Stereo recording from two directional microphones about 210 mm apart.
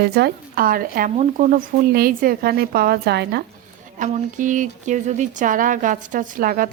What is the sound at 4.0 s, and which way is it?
Speech, 35° right (ahead or behind).